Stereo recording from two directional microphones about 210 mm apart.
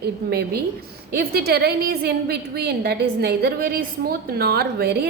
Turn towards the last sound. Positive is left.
turn(degrees=-50)  # may be behind; listen again after turning